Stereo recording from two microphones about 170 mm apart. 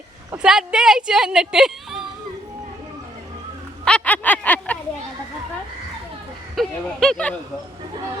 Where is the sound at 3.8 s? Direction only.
10° left (ahead or behind).